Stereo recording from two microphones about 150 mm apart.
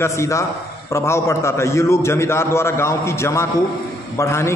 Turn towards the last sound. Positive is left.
turn(degrees=15)  # may be behind; listen again after turning